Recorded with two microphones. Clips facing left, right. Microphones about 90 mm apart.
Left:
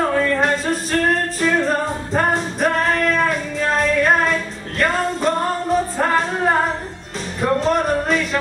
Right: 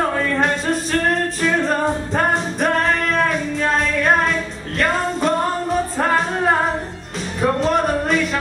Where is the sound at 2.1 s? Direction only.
Centre (ahead or behind).